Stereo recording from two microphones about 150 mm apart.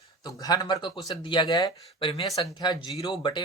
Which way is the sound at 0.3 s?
25° left (ahead or behind).